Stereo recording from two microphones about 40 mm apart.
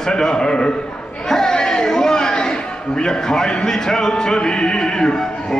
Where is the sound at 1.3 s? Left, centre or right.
Centre.